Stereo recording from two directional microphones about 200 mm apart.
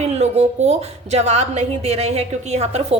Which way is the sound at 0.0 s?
35° right (ahead or behind).